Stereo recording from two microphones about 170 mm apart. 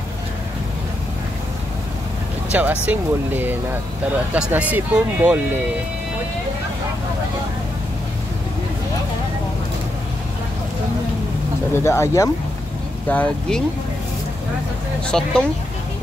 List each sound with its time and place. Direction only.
2.5 s speech: 10° right (ahead or behind)
11.7 s speech: 15° left (ahead or behind)
15.0 s speech: 5° left (ahead or behind)